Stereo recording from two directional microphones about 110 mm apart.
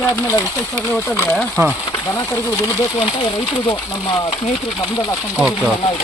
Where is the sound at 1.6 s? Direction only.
30° right (ahead or behind).